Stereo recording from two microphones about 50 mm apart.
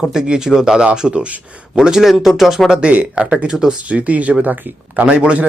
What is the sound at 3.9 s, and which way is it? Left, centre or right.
Speech, right.